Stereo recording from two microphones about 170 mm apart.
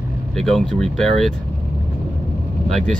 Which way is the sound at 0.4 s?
Centre (ahead or behind).